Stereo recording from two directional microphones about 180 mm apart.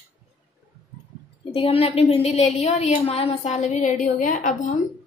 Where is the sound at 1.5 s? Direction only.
30° left (ahead or behind).